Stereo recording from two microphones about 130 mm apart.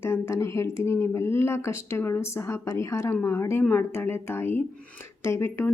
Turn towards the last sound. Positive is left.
turn(degrees=20)  # may be behind; listen again after turning